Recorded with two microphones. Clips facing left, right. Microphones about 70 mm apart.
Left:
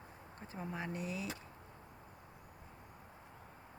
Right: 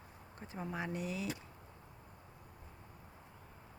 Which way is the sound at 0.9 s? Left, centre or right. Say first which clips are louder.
Right 2 dB; left.